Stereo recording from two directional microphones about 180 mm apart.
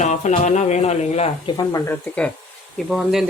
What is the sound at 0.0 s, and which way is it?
Speech, 40° left (ahead or behind).